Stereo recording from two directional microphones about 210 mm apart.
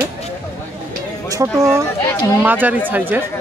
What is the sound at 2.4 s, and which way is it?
Speech, 10° right (ahead or behind).